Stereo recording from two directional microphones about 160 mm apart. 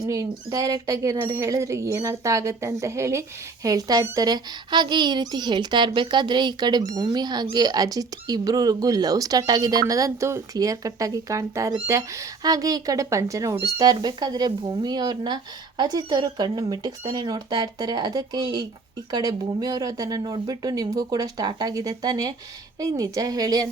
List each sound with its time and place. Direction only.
0.0 s speech: 20° right (ahead or behind)